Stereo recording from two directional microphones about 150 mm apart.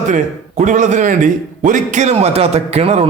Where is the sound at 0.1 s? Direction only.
55° right (ahead or behind).